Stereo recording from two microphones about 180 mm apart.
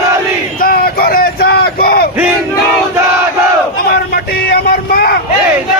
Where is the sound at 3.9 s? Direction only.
60° left (ahead or behind).